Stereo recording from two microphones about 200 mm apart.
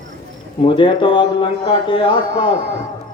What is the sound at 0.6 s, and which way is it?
A man's voice, 25° left (ahead or behind).